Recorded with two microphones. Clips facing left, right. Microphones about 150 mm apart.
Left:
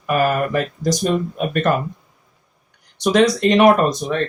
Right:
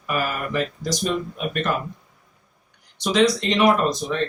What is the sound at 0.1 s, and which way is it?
Speech, 50° left (ahead or behind).